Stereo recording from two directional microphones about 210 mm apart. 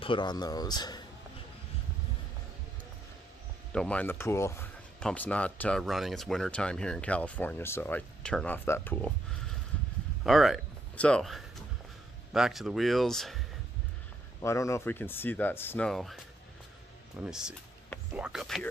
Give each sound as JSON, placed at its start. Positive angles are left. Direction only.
{"t": 0.0, "sound": "speech", "side_deg": 20}
{"t": 3.7, "sound": "speech", "side_deg": 5}
{"t": 10.2, "sound": "speech", "side_deg": 0}
{"t": 14.4, "sound": "speech", "side_deg": 15}
{"t": 17.2, "sound": "speech", "side_deg": -5}